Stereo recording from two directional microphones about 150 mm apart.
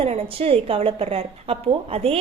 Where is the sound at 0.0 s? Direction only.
40° right (ahead or behind).